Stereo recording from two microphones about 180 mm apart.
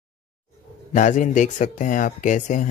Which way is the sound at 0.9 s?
45° left (ahead or behind).